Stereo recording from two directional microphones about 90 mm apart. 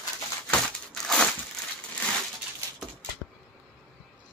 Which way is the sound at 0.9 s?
5° left (ahead or behind).